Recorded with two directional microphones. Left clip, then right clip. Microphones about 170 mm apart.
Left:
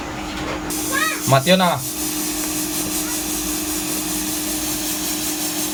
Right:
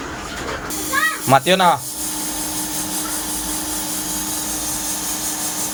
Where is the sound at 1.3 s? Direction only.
25° right (ahead or behind).